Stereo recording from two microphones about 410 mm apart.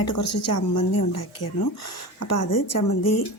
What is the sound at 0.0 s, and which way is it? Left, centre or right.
Speech, left.